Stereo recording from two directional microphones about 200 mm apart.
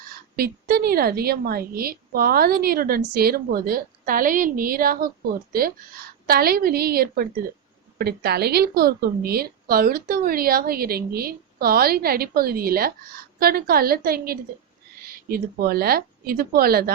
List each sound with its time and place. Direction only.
0.3 s a woman's voice: 50° right (ahead or behind)